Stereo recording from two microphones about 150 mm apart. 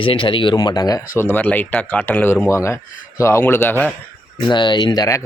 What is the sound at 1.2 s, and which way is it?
Speech, 15° left (ahead or behind).